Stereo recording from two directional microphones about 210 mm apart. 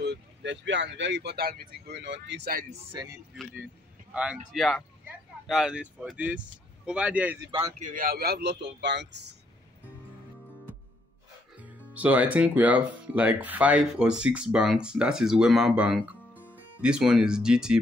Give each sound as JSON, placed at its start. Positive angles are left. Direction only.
{"t": 0.0, "sound": "speech", "side_deg": -55}
{"t": 2.9, "sound": "speech", "side_deg": -20}
{"t": 4.1, "sound": "speech", "side_deg": -5}
{"t": 7.8, "sound": "a man's voice", "side_deg": -40}
{"t": 11.6, "sound": "speech", "side_deg": -5}